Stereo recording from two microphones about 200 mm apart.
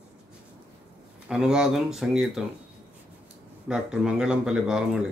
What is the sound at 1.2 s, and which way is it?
Speech, 5° right (ahead or behind).